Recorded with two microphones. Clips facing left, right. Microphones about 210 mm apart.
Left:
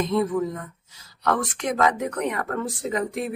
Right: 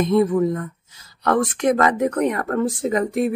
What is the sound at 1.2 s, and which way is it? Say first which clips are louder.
A woman's voice: right 6 dB; 50° right (ahead or behind).